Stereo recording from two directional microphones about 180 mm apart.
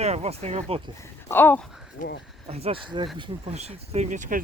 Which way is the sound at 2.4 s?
35° right (ahead or behind).